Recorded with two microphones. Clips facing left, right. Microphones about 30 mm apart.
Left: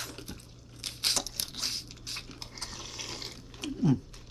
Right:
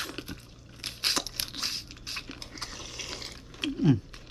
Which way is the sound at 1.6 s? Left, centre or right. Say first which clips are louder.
Right 1 dB; centre.